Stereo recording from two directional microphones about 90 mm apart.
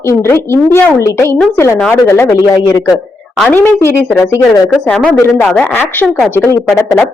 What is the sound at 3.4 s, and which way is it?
Speech, 20° left (ahead or behind).